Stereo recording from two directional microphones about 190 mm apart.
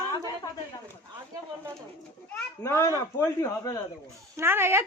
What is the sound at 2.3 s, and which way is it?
A child's voice, 10° left (ahead or behind).